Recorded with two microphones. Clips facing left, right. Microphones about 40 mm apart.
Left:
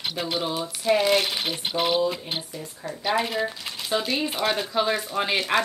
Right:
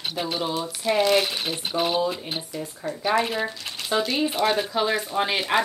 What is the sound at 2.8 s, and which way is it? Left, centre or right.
Speech, right.